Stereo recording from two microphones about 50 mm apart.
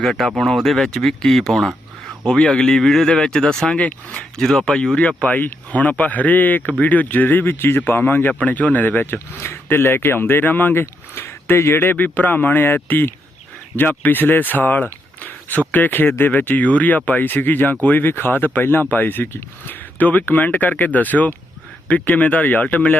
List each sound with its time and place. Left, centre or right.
0.0 s speech: centre
3.8 s speech: left
4.4 s speech: centre
4.9 s speech: left
8.3 s speech: left
9.1 s speech: left
11.1 s speech: left
11.8 s speech: left